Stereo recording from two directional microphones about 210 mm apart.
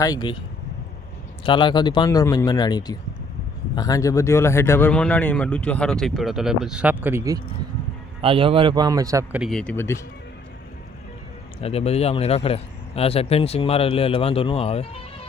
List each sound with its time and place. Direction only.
0.0 s speech: 20° left (ahead or behind)
1.5 s speech: 20° left (ahead or behind); by 7.3 s 10° right (ahead or behind)
8.2 s a man's voice: 25° right (ahead or behind)
9.4 s speech: 5° left (ahead or behind)
11.6 s speech: 30° left (ahead or behind)